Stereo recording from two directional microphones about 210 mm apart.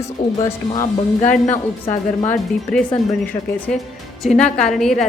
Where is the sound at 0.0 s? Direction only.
15° left (ahead or behind).